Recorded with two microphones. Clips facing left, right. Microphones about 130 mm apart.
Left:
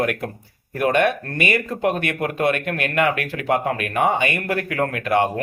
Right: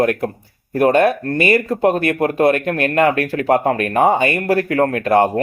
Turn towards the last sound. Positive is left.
turn(degrees=-40)  # may be behind; listen again after turning